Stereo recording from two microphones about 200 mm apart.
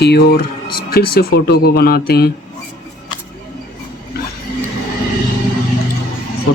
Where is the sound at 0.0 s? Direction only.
55° left (ahead or behind).